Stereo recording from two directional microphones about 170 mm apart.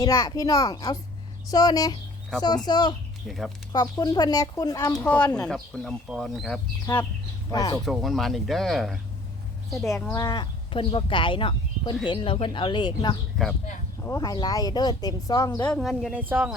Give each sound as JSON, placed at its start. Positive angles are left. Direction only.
{"t": 0.0, "sound": "speech", "side_deg": 20}
{"t": 3.2, "sound": "speech", "side_deg": 0}
{"t": 3.7, "sound": "speech", "side_deg": 25}
{"t": 4.9, "sound": "speech", "side_deg": 5}
{"t": 6.8, "sound": "speech", "side_deg": 10}
{"t": 7.9, "sound": "speech", "side_deg": 0}
{"t": 9.8, "sound": "speech", "side_deg": 20}
{"t": 13.4, "sound": "speech", "side_deg": 0}
{"t": 14.0, "sound": "speech", "side_deg": 20}
{"t": 15.6, "sound": "speech", "side_deg": 5}